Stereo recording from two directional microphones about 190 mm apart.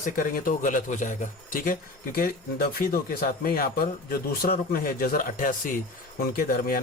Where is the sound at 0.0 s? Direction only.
45° left (ahead or behind).